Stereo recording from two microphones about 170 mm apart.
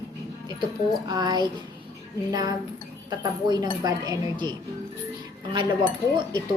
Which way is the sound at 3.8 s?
25° right (ahead or behind).